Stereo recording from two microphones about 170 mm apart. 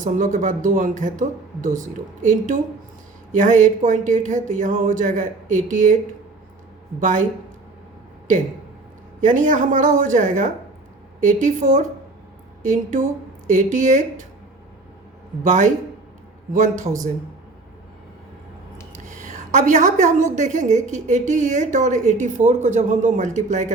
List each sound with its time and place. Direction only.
0.0 s a woman's voice: 50° right (ahead or behind)
7.0 s a woman's voice: 50° right (ahead or behind)
9.2 s a woman's voice: 50° right (ahead or behind)
15.4 s a woman's voice: 45° right (ahead or behind)
19.0 s a woman's voice: 50° right (ahead or behind)